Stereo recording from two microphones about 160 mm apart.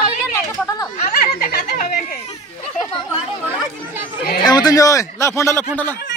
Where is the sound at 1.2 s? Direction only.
70° left (ahead or behind).